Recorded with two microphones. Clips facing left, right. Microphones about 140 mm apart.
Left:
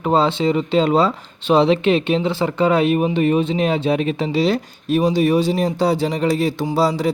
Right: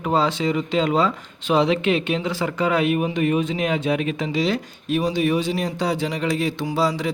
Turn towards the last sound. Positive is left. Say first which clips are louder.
# left 4 dB
turn(degrees=35)  # may be behind; listen again after turning